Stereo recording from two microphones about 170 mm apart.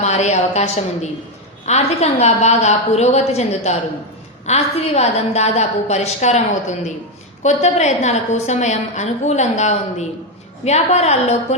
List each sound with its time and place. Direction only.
0.0 s a woman's voice: 40° left (ahead or behind)